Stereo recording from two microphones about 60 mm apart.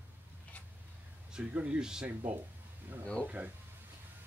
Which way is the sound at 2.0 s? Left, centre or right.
Right.